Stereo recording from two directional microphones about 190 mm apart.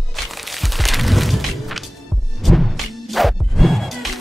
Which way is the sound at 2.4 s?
Centre (ahead or behind).